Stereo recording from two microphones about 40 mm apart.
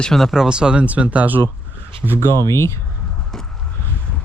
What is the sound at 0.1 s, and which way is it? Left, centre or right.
Speech, centre.